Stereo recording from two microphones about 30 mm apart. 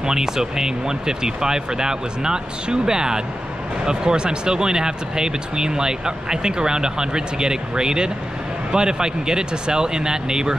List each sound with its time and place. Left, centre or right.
0.0 s speech: centre